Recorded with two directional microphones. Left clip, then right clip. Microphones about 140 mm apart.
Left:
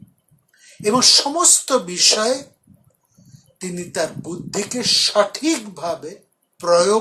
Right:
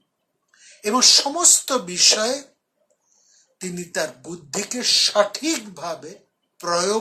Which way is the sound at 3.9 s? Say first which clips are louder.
Left 3 dB; 30° right (ahead or behind).